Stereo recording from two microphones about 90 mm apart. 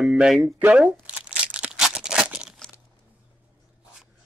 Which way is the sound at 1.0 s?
15° right (ahead or behind).